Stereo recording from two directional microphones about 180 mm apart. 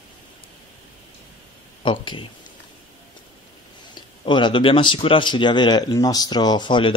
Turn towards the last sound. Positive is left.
turn(degrees=25)  # may be behind; listen again after turning